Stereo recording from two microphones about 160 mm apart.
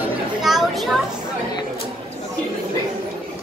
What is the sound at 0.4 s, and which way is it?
Children playing, centre (ahead or behind).